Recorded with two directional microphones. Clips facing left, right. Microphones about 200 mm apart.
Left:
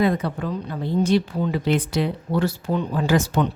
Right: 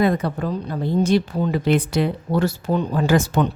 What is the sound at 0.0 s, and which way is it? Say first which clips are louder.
Speech: right 2 dB; 45° right (ahead or behind).